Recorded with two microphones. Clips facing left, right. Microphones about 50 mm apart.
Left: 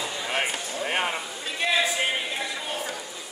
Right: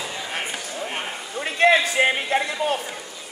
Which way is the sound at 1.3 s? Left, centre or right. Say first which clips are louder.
Right 9 dB; right.